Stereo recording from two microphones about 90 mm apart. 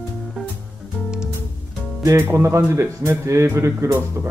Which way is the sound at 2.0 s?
30° right (ahead or behind).